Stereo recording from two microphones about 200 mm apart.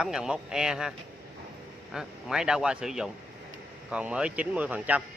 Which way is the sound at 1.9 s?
5° right (ahead or behind).